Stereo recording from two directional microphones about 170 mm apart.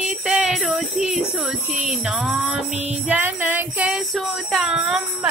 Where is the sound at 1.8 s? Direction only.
5° right (ahead or behind).